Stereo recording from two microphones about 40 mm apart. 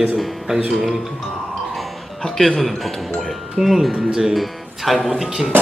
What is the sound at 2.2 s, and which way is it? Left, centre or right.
Speech, centre.